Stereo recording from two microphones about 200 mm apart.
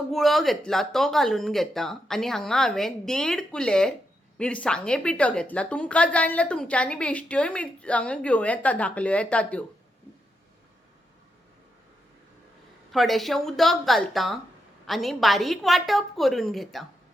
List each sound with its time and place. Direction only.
0.1 s a woman's voice: centre (ahead or behind)
12.9 s a woman's voice: centre (ahead or behind)